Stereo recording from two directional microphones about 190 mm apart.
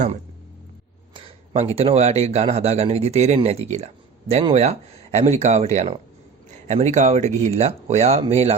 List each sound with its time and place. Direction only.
1.1 s speech: 30° right (ahead or behind)